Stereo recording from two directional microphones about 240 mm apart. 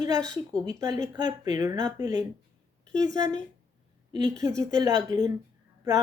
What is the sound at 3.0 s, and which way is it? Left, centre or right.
A woman's voice, centre.